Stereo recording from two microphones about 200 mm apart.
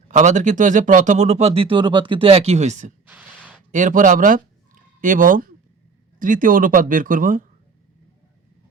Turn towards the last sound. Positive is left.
turn(degrees=-40)  # may be behind; listen again after turning